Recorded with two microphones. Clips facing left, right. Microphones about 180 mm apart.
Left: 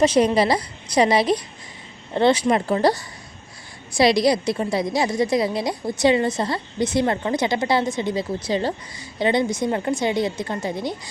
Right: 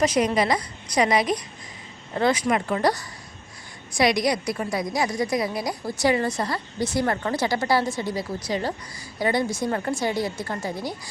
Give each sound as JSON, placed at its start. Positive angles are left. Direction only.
{"t": 0.0, "sound": "a woman's voice", "side_deg": 30}